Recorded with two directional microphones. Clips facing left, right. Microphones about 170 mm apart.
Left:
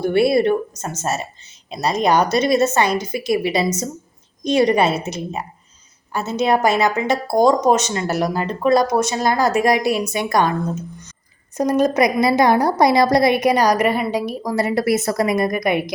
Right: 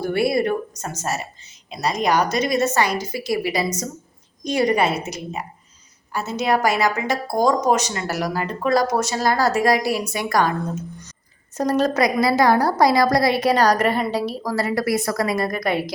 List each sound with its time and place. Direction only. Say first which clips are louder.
0.0 s a woman's voice: left 4 dB; 25° left (ahead or behind)
11.5 s a woman's voice: left 3 dB; 15° left (ahead or behind)